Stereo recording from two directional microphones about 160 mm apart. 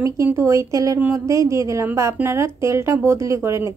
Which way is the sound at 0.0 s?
15° right (ahead or behind).